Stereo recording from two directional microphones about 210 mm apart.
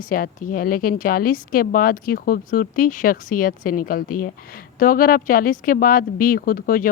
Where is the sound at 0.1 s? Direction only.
40° left (ahead or behind).